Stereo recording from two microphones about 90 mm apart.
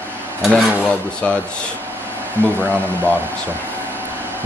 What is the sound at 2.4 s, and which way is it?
Speech, 25° right (ahead or behind).